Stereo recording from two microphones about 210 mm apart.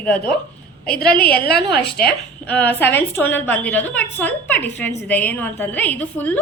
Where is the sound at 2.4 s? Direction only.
5° left (ahead or behind).